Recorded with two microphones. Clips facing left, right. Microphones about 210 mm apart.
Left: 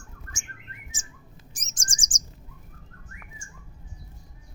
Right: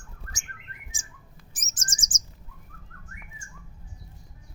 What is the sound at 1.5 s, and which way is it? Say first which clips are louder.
Chirp: right 2 dB; 5° right (ahead or behind).